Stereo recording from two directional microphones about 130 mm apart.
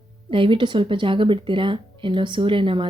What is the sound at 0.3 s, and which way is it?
Speech, 40° right (ahead or behind).